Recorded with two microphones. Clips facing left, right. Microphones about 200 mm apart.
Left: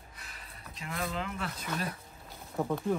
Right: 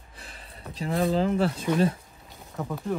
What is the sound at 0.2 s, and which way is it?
Speech, 30° right (ahead or behind).